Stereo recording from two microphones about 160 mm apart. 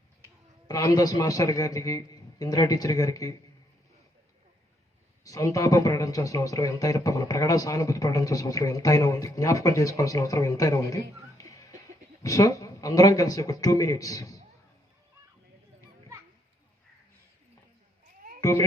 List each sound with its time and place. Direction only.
0.7 s speech: 20° left (ahead or behind)
5.2 s speech: 20° left (ahead or behind)
18.3 s a sound: 20° left (ahead or behind)